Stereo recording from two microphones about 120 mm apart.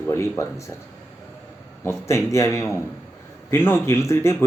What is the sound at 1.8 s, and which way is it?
Speech, 25° left (ahead or behind).